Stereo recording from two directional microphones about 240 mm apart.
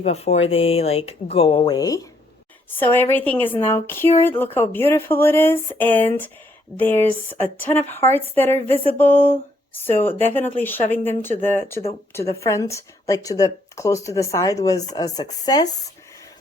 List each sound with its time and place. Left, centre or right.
0.0 s speech: left